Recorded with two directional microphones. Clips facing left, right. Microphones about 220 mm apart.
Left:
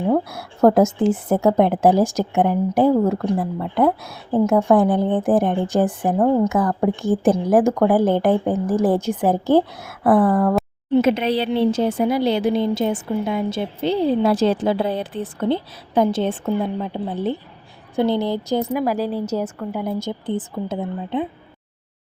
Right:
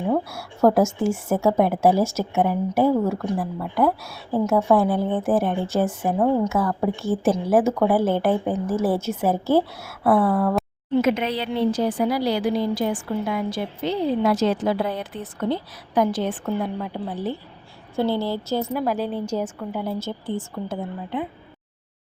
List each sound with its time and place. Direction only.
0.7 s a woman's voice: 20° left (ahead or behind)
7.6 s speech: 5° right (ahead or behind)
7.9 s a woman's voice: 15° left (ahead or behind)
10.9 s a woman's voice: 30° left (ahead or behind)